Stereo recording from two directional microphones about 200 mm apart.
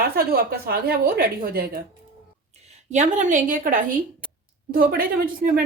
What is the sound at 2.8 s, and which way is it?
A woman's voice, 35° right (ahead or behind).